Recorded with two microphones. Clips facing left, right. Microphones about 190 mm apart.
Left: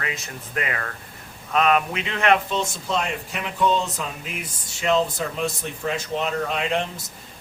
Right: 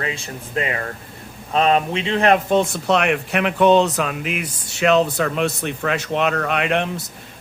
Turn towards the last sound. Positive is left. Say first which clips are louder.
# right 4 dB
turn(degrees=-65)  # may be behind; listen again after turning